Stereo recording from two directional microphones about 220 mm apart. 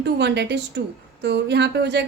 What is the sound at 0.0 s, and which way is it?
A woman's voice, 50° right (ahead or behind).